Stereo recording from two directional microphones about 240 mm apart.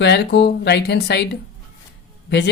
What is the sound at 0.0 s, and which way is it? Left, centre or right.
Speech, left.